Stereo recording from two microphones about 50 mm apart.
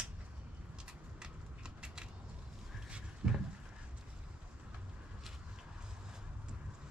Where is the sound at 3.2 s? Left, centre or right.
Centre.